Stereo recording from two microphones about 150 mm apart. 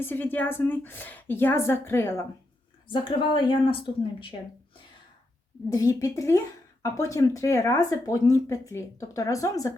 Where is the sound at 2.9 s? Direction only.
35° left (ahead or behind).